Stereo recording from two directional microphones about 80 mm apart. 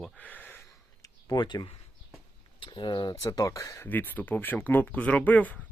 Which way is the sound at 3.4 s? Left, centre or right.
Left.